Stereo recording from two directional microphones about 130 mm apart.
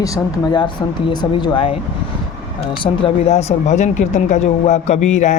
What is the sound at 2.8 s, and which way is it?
Speech, 40° left (ahead or behind).